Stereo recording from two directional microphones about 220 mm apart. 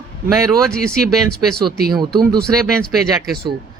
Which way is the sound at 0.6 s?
5° left (ahead or behind).